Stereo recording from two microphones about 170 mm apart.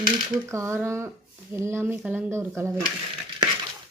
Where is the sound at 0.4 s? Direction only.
15° right (ahead or behind).